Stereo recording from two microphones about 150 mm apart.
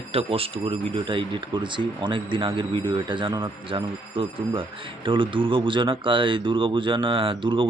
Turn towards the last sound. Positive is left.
turn(degrees=-35)  # may be behind; listen again after turning